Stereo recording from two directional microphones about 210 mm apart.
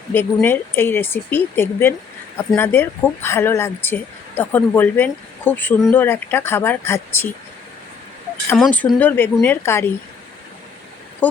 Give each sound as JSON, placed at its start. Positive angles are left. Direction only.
{"t": 0.1, "sound": "speech", "side_deg": 10}
{"t": 8.5, "sound": "speech", "side_deg": 5}
{"t": 11.2, "sound": "speech", "side_deg": 10}